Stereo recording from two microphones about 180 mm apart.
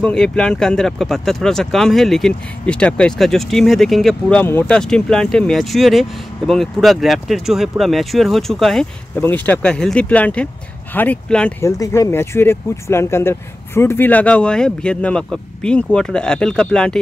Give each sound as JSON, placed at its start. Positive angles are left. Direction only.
{"t": 0.0, "sound": "speech", "side_deg": 5}
{"t": 11.6, "sound": "speech", "side_deg": 15}